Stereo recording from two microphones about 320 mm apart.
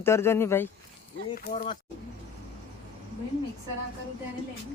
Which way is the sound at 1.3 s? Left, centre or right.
Left.